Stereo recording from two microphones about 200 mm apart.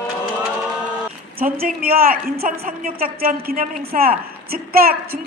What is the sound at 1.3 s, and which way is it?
A woman's voice, 45° right (ahead or behind).